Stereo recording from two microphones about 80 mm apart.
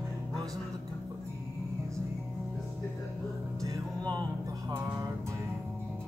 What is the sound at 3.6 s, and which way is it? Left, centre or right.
Music, right.